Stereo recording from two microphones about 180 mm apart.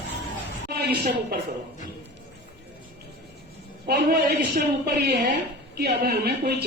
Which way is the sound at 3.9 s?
60° right (ahead or behind).